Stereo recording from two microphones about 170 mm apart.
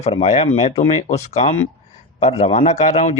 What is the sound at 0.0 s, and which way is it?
A man's voice, 40° left (ahead or behind).